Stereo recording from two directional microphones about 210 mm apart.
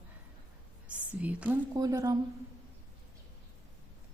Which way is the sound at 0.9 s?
5° right (ahead or behind).